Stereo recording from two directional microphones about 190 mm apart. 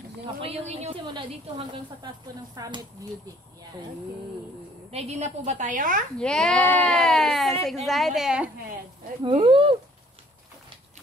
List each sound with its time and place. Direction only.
0.4 s a woman's voice: 35° right (ahead or behind)
2.5 s speech: 20° right (ahead or behind)
4.9 s a woman's voice: 35° right (ahead or behind)
6.1 s speech: 5° left (ahead or behind)
9.2 s speech: 25° right (ahead or behind)